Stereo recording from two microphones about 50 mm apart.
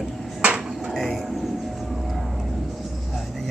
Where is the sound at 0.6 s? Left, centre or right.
Centre.